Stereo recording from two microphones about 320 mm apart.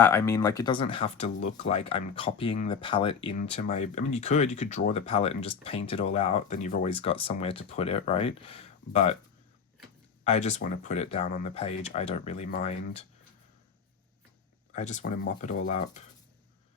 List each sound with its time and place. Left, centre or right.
0.0 s speech: centre
10.2 s speech: left
14.7 s speech: left